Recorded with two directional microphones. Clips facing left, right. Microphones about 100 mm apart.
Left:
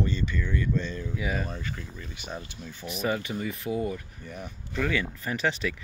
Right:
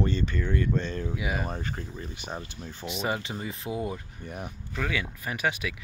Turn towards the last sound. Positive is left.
turn(degrees=-10)  # may be behind; listen again after turning